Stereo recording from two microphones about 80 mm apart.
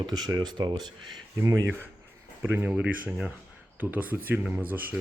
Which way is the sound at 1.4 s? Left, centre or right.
Right.